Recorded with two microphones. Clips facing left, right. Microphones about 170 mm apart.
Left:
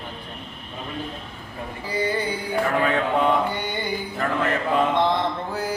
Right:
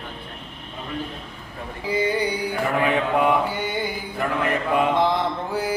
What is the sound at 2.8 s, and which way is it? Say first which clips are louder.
Mantra: right 2 dB; 15° right (ahead or behind).